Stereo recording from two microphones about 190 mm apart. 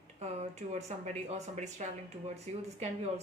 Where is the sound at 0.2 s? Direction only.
35° right (ahead or behind).